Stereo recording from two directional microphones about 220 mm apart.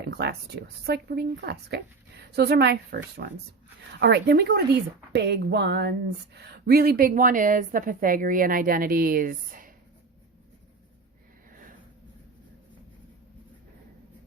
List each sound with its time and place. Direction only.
0.0 s a woman's voice: 50° right (ahead or behind)